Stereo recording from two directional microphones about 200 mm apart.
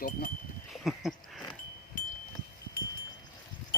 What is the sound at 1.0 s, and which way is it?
Speech, centre (ahead or behind).